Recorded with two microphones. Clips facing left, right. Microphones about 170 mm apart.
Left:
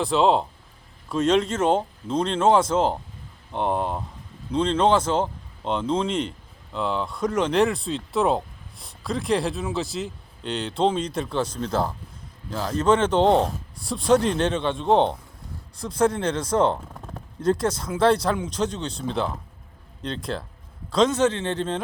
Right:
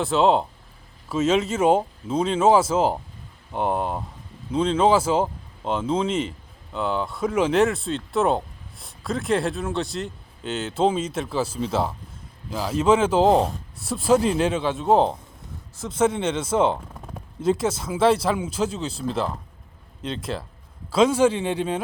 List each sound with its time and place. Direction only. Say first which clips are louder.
0.0 s speech: right 1 dB; centre (ahead or behind)